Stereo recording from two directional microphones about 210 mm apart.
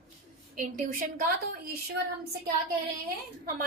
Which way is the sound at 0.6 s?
40° right (ahead or behind).